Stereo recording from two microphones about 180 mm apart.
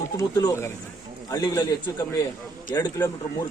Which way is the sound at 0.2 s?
20° left (ahead or behind).